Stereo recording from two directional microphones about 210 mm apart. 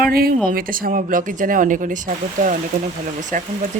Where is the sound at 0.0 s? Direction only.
45° right (ahead or behind).